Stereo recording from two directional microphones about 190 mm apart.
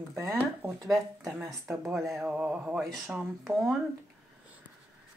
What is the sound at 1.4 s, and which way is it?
Speech, 15° right (ahead or behind).